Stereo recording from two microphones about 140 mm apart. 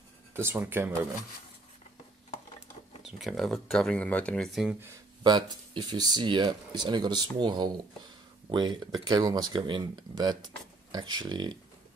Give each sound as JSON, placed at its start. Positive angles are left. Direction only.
{"t": 0.3, "sound": "speech", "side_deg": -15}
{"t": 3.0, "sound": "speech", "side_deg": 0}
{"t": 5.2, "sound": "speech", "side_deg": -30}